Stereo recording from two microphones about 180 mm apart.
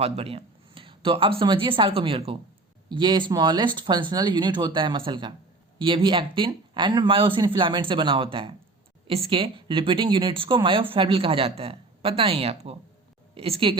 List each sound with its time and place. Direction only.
0.0 s speech: 35° right (ahead or behind)